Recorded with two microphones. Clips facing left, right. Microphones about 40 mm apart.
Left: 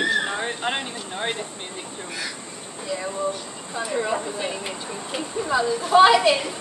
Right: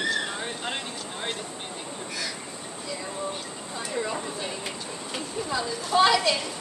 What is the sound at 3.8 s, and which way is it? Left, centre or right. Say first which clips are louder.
A woman's voice: left 6 dB; left.